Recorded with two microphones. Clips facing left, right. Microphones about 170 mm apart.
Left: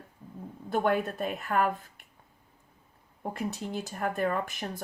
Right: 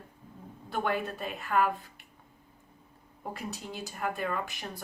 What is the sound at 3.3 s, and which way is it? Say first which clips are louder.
A woman's voice: left 5 dB; 50° left (ahead or behind).